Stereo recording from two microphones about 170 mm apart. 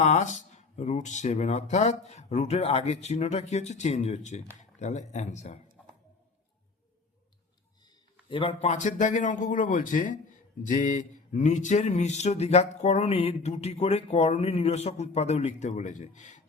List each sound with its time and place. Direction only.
0.0 s speech: 45° left (ahead or behind)
8.3 s speech: 35° left (ahead or behind)